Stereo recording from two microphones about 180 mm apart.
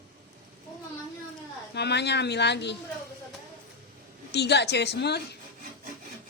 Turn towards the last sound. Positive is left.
turn(degrees=70)  # may be behind; listen again after turning